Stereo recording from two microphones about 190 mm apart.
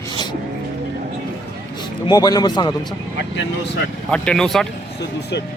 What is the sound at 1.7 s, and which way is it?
Speech, 20° left (ahead or behind).